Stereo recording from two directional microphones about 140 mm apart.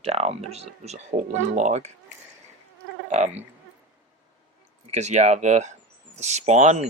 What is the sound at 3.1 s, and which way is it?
Speech, 55° right (ahead or behind).